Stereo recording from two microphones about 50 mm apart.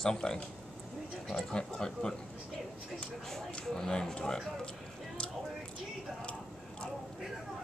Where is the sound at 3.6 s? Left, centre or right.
Centre.